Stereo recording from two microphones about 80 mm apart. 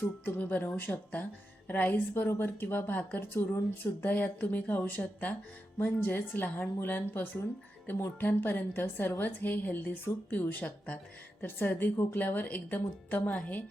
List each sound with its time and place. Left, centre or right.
0.3 s a woman's voice: left